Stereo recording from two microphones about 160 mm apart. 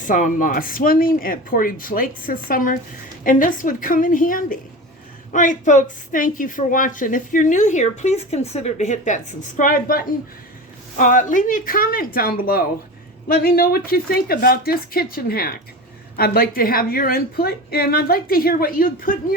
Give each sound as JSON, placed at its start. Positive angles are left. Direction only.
{"t": 0.0, "sound": "a woman's voice", "side_deg": 55}
{"t": 10.9, "sound": "a woman's voice", "side_deg": 55}